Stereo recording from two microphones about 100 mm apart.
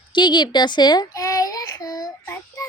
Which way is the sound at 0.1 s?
50° left (ahead or behind).